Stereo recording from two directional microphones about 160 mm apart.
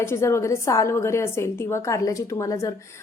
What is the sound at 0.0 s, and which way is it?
A woman's voice, 15° left (ahead or behind).